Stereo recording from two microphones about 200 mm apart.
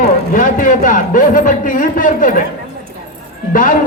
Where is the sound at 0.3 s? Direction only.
40° left (ahead or behind).